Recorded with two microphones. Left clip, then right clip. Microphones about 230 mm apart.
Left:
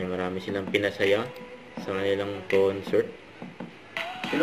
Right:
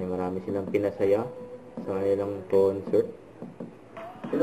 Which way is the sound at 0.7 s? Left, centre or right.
Left.